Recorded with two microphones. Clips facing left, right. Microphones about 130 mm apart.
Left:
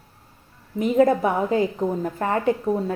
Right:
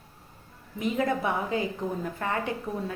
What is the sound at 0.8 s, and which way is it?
A woman's voice, 40° left (ahead or behind).